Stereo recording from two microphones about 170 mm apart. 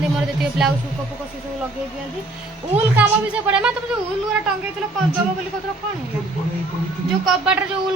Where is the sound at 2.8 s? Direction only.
10° right (ahead or behind).